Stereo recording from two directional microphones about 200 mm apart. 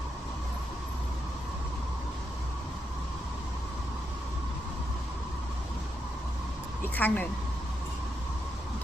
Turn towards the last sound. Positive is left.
turn(degrees=10)  # may be behind; listen again after turning